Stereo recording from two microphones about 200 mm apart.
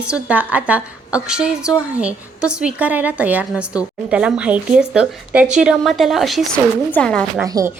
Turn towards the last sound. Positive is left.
turn(degrees=-15)  # may be behind; listen again after turning